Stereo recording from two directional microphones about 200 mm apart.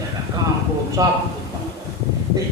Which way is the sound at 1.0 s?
15° right (ahead or behind).